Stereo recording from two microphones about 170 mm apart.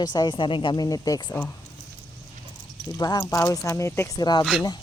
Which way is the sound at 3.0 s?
25° left (ahead or behind).